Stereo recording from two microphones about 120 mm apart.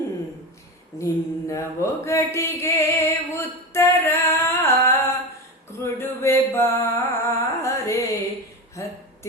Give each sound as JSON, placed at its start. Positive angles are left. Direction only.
{"t": 0.9, "sound": "mantra", "side_deg": 25}
{"t": 5.8, "sound": "music", "side_deg": 20}